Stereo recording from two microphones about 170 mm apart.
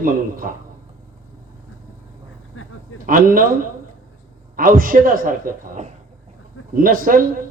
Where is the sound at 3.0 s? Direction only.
55° right (ahead or behind).